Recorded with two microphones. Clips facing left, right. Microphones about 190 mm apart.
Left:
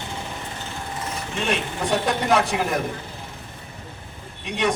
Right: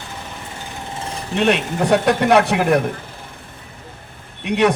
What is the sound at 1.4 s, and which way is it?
A man's voice, 65° right (ahead or behind).